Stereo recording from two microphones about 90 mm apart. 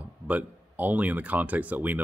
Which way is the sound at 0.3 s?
20° right (ahead or behind).